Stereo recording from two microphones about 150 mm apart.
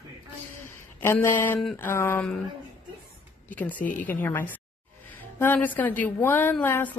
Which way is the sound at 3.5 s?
10° left (ahead or behind).